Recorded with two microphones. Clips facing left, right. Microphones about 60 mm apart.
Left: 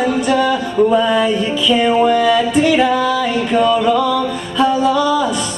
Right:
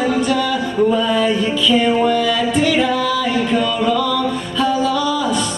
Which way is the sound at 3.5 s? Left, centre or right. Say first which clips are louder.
Left 7 dB; left.